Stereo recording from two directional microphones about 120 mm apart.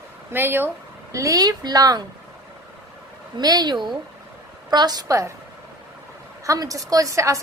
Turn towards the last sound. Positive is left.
turn(degrees=-25)  # may be behind; listen again after turning